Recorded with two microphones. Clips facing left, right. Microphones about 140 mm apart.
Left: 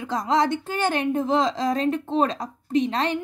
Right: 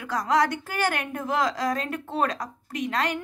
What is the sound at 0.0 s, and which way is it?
A woman's voice, 25° left (ahead or behind).